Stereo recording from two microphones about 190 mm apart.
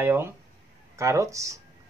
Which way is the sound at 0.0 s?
10° right (ahead or behind).